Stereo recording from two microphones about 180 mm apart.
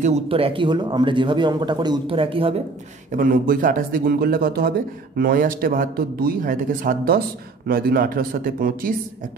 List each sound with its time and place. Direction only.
0.0 s speech: 35° right (ahead or behind)
3.1 s a man's voice: 50° right (ahead or behind)